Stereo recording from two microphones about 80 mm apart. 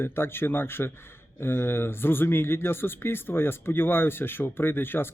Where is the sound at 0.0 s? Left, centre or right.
Left.